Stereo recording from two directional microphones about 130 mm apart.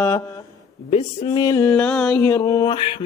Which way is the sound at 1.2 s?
30° left (ahead or behind).